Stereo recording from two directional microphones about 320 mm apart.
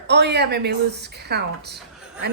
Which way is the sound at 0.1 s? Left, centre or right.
Right.